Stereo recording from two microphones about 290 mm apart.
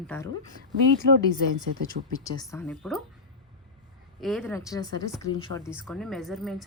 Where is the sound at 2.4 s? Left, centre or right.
Centre.